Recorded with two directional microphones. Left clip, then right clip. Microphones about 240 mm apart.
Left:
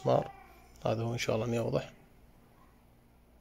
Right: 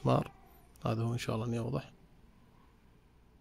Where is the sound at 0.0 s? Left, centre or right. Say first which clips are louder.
Left 3 dB; right; by 2.0 s centre.